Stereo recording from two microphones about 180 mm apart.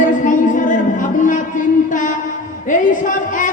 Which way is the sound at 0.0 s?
45° left (ahead or behind).